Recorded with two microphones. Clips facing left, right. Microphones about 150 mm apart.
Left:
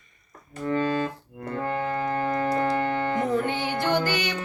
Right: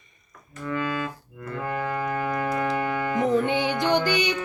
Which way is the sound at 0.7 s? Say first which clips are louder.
Left 3 dB; 35° left (ahead or behind).